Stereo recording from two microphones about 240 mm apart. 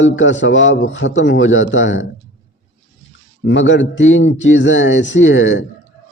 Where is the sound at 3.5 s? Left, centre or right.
Left.